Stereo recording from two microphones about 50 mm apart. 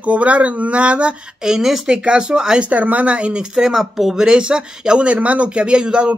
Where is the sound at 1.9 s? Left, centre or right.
Centre.